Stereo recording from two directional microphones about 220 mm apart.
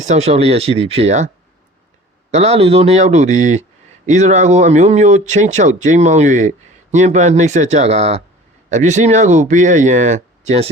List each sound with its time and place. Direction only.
0.0 s speech: 30° right (ahead or behind)
2.3 s speech: 30° right (ahead or behind)